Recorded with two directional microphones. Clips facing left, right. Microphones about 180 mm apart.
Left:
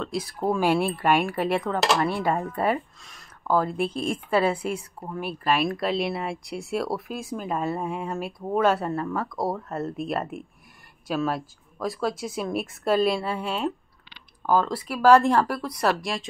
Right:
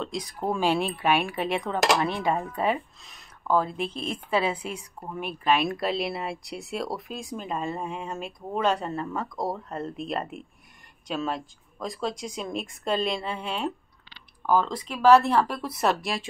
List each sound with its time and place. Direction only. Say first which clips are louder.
0.0 s speech: left 3 dB; 5° left (ahead or behind)
2.3 s speech: left 2 dB; 10° right (ahead or behind); by 8.9 s 5° left (ahead or behind)
8.9 s speech: left 3 dB; 20° right (ahead or behind)
9.4 s speech: left 2 dB; 5° left (ahead or behind)
15.8 s speech: even; centre (ahead or behind)